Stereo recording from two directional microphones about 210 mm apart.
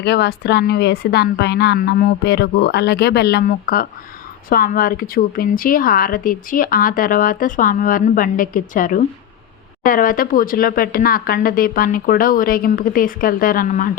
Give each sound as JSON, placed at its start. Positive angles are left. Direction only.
{"t": 0.0, "sound": "a woman's voice", "side_deg": 50}